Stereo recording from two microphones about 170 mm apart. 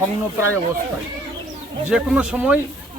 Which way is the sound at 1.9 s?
5° right (ahead or behind).